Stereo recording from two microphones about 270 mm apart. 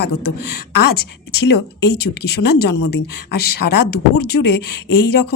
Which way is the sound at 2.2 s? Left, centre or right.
Left.